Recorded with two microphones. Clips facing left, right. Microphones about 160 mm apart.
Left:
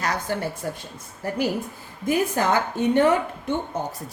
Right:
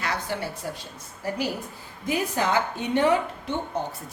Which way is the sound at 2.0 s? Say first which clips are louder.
Left 4 dB; 50° left (ahead or behind).